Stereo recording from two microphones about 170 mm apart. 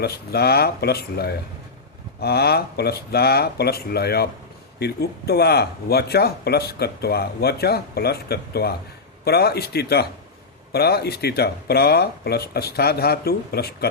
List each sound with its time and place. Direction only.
0.0 s speech: 70° left (ahead or behind)